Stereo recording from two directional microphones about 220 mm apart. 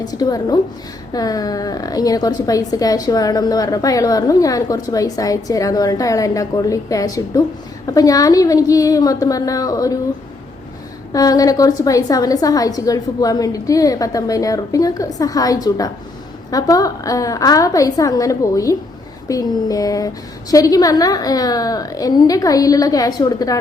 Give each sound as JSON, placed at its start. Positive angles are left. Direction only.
{"t": 0.0, "sound": "a woman's voice", "side_deg": 15}
{"t": 11.1, "sound": "a woman's voice", "side_deg": 15}